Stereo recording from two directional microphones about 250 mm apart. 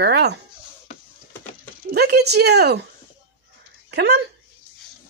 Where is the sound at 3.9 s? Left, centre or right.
Right.